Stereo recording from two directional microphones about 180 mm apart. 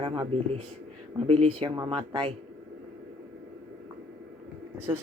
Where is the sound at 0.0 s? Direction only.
30° right (ahead or behind).